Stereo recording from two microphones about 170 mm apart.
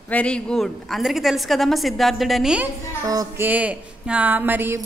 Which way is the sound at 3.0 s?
20° right (ahead or behind).